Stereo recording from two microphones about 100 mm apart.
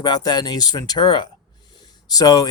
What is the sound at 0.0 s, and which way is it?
Speech, 45° left (ahead or behind).